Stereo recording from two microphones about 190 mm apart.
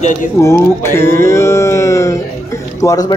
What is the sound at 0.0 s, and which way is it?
Speech, 35° left (ahead or behind).